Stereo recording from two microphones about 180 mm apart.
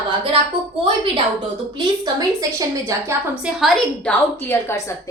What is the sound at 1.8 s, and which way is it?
A woman's voice, 20° right (ahead or behind).